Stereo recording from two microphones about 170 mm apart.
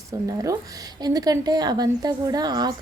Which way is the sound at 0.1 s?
20° right (ahead or behind).